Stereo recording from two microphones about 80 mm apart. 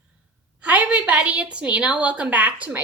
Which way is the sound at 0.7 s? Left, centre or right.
Centre.